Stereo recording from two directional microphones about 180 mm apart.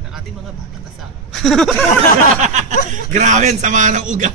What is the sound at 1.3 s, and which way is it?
Speech, centre (ahead or behind).